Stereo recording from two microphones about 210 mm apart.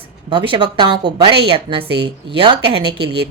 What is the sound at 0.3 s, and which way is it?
Speech, 25° right (ahead or behind).